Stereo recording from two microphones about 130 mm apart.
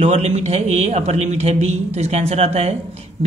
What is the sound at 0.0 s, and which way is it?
Speech, 55° right (ahead or behind).